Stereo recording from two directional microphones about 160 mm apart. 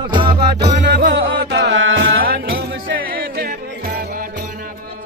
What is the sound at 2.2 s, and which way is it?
Music, 70° right (ahead or behind).